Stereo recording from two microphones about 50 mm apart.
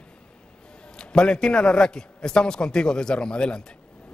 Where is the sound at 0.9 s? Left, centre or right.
Centre.